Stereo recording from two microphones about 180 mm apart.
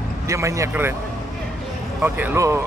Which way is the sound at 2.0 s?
10° right (ahead or behind).